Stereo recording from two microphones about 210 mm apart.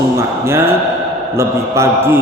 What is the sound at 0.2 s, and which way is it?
A man's voice, 10° right (ahead or behind).